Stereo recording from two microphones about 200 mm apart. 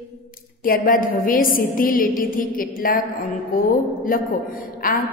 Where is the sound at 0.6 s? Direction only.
45° left (ahead or behind).